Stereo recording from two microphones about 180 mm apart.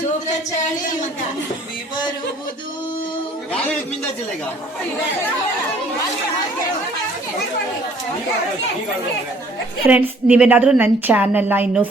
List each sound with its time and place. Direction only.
9.8 s a woman's voice: 10° right (ahead or behind)